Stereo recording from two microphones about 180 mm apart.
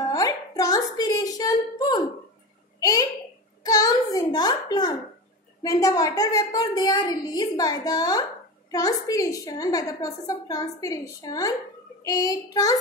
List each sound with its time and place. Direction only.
0.0 s music: 20° left (ahead or behind)
2.8 s a sound: 20° left (ahead or behind)
5.6 s a woman's voice: 20° left (ahead or behind)